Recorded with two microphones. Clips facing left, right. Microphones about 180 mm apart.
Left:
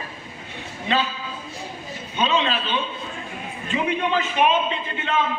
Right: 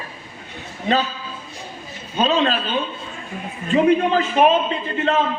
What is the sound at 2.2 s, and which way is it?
A man's voice, 40° right (ahead or behind).